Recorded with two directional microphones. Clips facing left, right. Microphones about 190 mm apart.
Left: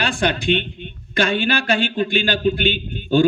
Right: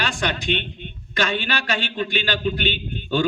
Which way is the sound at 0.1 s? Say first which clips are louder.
Left 5 dB; 50° left (ahead or behind).